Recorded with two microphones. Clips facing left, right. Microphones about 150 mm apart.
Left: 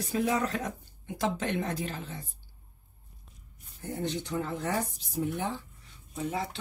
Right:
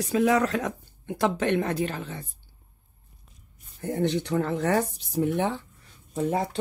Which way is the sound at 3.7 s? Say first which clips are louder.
Right 8 dB; 65° right (ahead or behind).